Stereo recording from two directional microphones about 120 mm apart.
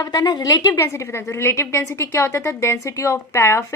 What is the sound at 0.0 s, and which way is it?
Speech, 30° left (ahead or behind).